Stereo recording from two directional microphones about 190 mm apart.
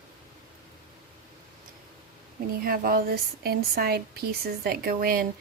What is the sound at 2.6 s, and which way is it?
Speech, 50° right (ahead or behind).